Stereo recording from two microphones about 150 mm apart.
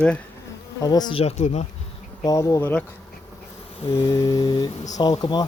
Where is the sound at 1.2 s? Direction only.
45° left (ahead or behind).